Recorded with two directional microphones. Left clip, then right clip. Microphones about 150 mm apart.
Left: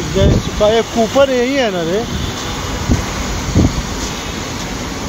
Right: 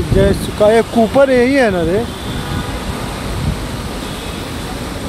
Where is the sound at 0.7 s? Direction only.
45° right (ahead or behind).